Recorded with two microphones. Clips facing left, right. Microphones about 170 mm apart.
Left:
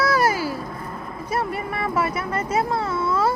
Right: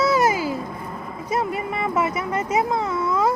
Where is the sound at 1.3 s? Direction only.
20° right (ahead or behind).